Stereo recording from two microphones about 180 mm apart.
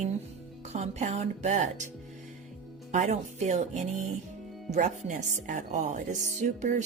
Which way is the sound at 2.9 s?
40° right (ahead or behind).